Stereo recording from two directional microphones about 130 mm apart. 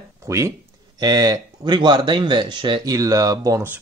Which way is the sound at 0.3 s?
25° right (ahead or behind).